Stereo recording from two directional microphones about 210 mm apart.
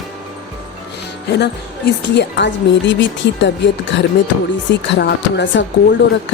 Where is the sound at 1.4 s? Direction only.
55° left (ahead or behind).